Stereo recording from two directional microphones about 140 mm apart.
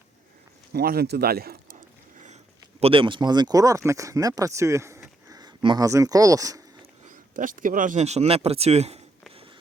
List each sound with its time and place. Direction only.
0.7 s speech: 90° right
2.8 s speech: 40° right (ahead or behind)
7.3 s speech: 75° right (ahead or behind)
8.0 s speech: 50° right (ahead or behind)
9.3 s a sound: 40° right (ahead or behind)